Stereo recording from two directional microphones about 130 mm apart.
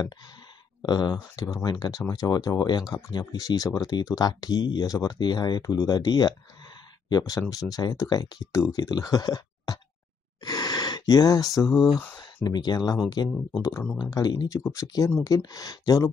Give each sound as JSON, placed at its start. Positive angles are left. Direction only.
{"t": 0.8, "sound": "speech", "side_deg": 30}
{"t": 10.4, "sound": "a sound", "side_deg": 30}
{"t": 12.4, "sound": "speech", "side_deg": 30}